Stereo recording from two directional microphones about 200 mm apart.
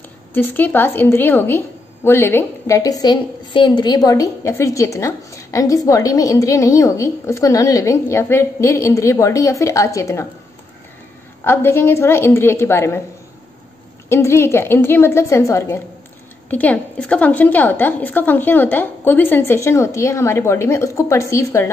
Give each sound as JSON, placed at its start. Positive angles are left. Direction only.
{"t": 0.3, "sound": "a woman's voice", "side_deg": 10}
{"t": 11.4, "sound": "a woman's voice", "side_deg": 10}
{"t": 14.0, "sound": "a woman's voice", "side_deg": 15}